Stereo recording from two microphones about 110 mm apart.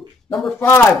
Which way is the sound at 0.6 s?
20° left (ahead or behind).